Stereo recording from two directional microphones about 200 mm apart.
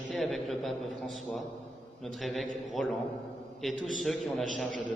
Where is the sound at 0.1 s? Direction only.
Centre (ahead or behind).